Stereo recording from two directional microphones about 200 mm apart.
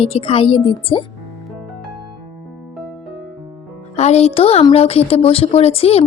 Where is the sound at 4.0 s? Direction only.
35° left (ahead or behind).